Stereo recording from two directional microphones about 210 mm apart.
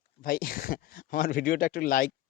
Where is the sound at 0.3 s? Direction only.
45° left (ahead or behind).